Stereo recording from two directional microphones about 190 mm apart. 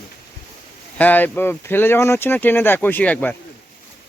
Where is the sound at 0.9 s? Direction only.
10° left (ahead or behind).